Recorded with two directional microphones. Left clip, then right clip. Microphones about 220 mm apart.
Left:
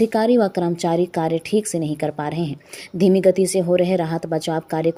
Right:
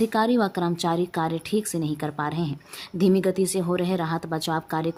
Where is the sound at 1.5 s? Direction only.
30° right (ahead or behind).